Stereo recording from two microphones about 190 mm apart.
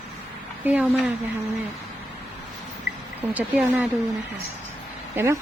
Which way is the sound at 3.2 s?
10° right (ahead or behind).